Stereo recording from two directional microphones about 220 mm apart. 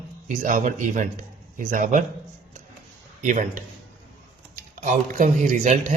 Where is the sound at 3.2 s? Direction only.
35° right (ahead or behind).